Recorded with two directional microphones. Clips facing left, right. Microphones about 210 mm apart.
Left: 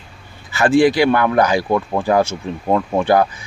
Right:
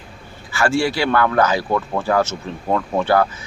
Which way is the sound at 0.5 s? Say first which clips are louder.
Left 6 dB; 20° left (ahead or behind).